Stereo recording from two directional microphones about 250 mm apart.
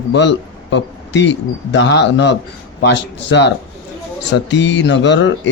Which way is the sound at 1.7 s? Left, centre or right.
Left.